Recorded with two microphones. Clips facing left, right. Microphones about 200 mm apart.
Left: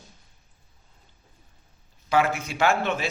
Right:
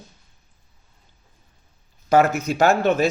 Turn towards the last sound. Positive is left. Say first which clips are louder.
# right 6 dB
turn(degrees=-40)  # may be behind; listen again after turning